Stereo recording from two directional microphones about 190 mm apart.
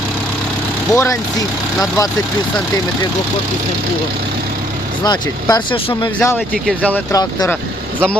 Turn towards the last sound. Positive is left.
turn(degrees=5)  # may be behind; listen again after turning